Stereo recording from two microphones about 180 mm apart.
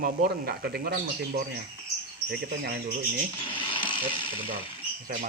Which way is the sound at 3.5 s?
30° left (ahead or behind).